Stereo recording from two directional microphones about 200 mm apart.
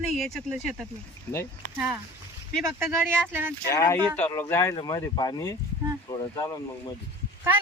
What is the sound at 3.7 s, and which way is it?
Speech, 15° left (ahead or behind).